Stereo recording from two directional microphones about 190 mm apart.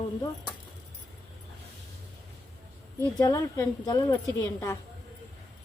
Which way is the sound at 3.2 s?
20° left (ahead or behind).